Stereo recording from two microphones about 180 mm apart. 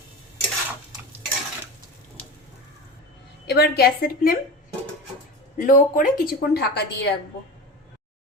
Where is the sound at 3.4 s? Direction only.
65° left (ahead or behind).